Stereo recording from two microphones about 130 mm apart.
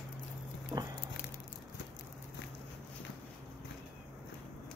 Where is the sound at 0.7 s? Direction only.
15° right (ahead or behind).